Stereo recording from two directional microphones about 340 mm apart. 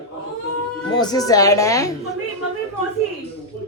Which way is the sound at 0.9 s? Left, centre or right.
Centre.